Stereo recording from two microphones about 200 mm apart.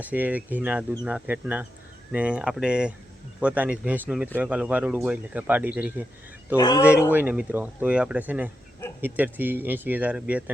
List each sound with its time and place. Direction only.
0.0 s speech: 10° right (ahead or behind)
6.6 s speech: 20° left (ahead or behind)
7.1 s speech: 10° right (ahead or behind)